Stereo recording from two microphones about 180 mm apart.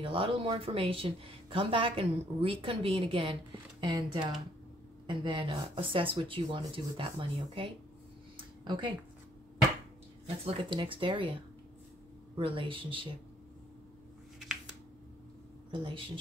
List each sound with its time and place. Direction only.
0.0 s speech: 30° right (ahead or behind)
8.4 s a sound: 30° right (ahead or behind)
10.2 s speech: 30° right (ahead or behind)
12.4 s speech: 30° right (ahead or behind)
15.7 s speech: 30° right (ahead or behind)